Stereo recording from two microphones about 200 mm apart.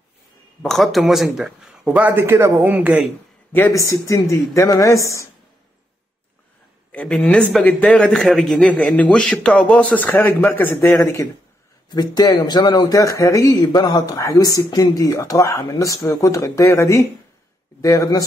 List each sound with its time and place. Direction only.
0.6 s speech: centre (ahead or behind)
3.5 s speech: 15° left (ahead or behind)
6.9 s speech: 5° left (ahead or behind)